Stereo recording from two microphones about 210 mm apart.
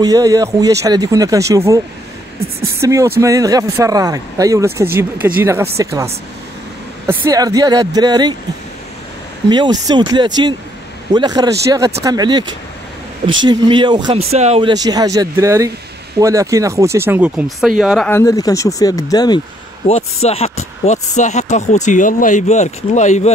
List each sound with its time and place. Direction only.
0.0 s speech: 15° right (ahead or behind)
2.8 s speech: 15° right (ahead or behind)
7.1 s speech: 15° right (ahead or behind)
9.5 s speech: 20° right (ahead or behind)
13.5 s speech: 20° right (ahead or behind)
14.7 s speech: 20° right (ahead or behind); by 18.2 s 5° left (ahead or behind)
18.2 s speech: 15° left (ahead or behind)
19.9 s speech: 30° left (ahead or behind)